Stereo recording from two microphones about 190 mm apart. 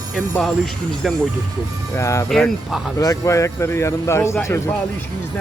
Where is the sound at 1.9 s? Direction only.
15° left (ahead or behind).